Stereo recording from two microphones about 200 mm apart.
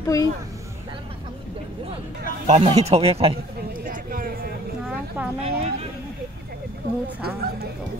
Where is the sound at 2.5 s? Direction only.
30° right (ahead or behind).